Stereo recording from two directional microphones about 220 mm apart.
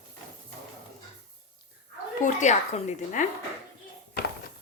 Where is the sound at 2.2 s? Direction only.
35° left (ahead or behind).